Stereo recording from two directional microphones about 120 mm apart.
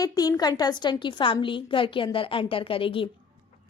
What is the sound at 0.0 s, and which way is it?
A woman's voice, 30° left (ahead or behind).